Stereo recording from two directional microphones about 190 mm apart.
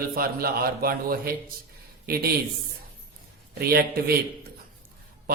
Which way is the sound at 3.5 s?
50° right (ahead or behind).